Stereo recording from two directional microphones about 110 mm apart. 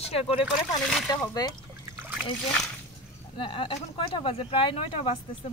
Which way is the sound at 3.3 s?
50° left (ahead or behind).